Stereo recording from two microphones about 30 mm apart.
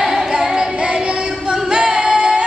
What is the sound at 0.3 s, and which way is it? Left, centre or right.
Music, right.